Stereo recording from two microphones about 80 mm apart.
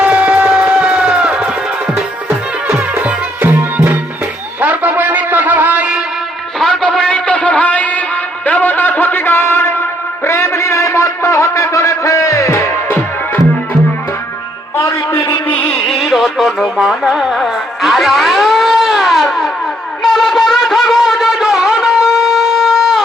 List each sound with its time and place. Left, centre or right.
0.0 s music: centre
2.6 s music: right
6.6 s music: centre; by 9.7 s left
10.2 s a sound: left
14.8 s music: left
15.4 s carnatic music: left
15.9 s music: centre
20.0 s wind instrument: centre